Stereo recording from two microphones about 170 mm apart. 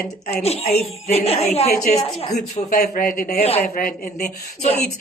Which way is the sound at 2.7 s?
60° left (ahead or behind).